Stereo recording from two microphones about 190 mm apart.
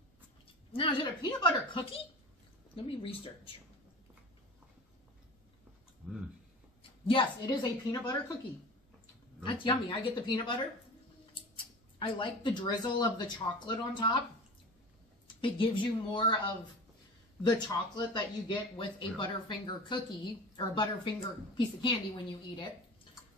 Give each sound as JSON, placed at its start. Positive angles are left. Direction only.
{"t": 0.7, "sound": "speech", "side_deg": 25}
{"t": 6.8, "sound": "a woman's voice", "side_deg": 25}
{"t": 9.4, "sound": "speech", "side_deg": 25}
{"t": 15.2, "sound": "speech", "side_deg": 25}